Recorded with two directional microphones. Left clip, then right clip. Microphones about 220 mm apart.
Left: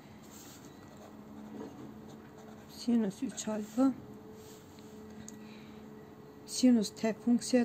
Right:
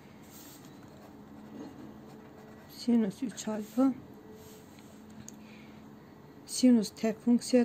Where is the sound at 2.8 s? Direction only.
10° right (ahead or behind).